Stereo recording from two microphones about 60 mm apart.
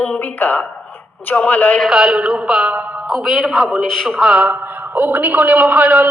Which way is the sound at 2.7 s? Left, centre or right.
Right.